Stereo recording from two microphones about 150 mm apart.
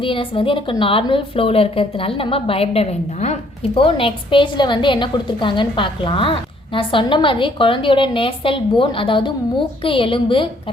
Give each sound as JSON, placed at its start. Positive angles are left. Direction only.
{"t": 0.0, "sound": "a woman's voice", "side_deg": 35}